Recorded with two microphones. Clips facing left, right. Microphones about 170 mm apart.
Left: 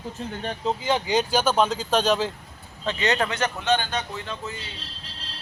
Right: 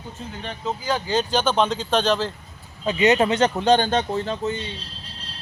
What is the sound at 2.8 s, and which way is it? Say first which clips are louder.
Speech: right 6 dB; 15° right (ahead or behind).